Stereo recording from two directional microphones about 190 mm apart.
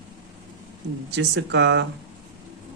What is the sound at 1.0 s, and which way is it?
Speech, 70° right (ahead or behind).